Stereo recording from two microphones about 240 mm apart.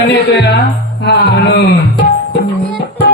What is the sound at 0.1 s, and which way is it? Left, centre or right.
A man's voice, left.